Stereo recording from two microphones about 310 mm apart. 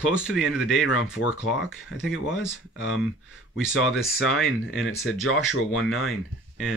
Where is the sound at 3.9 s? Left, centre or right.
Centre.